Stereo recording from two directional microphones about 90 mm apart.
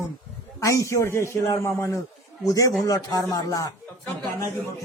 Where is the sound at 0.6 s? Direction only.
35° left (ahead or behind).